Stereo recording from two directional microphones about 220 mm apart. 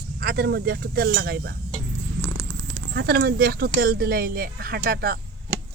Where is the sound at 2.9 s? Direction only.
45° right (ahead or behind).